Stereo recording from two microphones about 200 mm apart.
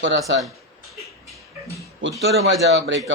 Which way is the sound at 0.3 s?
65° right (ahead or behind).